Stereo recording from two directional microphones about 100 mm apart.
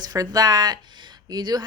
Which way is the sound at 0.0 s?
40° right (ahead or behind).